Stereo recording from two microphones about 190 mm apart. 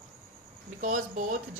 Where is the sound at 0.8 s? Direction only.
45° right (ahead or behind).